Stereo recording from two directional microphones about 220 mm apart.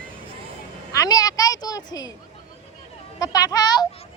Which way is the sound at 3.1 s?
15° left (ahead or behind).